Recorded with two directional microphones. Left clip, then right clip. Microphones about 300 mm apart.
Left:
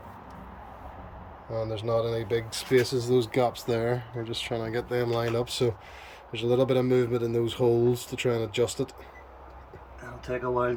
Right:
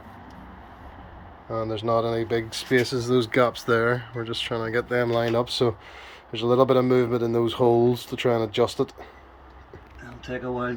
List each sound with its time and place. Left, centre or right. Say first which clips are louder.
1.5 s speech: right 4 dB; centre